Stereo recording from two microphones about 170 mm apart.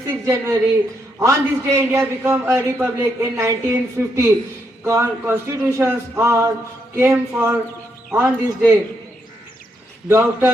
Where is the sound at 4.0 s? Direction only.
10° right (ahead or behind).